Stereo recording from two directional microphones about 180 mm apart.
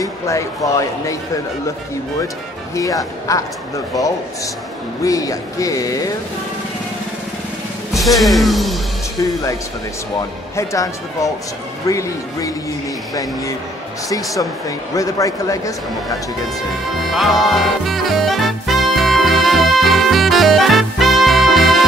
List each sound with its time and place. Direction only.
0.0 s speech: 20° left (ahead or behind)
2.7 s speech: 20° left (ahead or behind)
7.9 s speech: centre (ahead or behind)
9.2 s speech: 20° left (ahead or behind)
11.9 s speech: 20° left (ahead or behind)
15.0 s speech: 20° left (ahead or behind)
17.0 s music: centre (ahead or behind)